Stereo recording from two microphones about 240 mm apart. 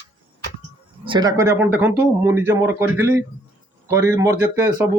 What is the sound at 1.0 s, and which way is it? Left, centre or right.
Speech, centre.